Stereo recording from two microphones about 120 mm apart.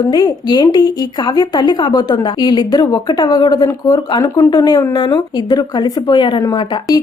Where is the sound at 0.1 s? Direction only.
35° left (ahead or behind).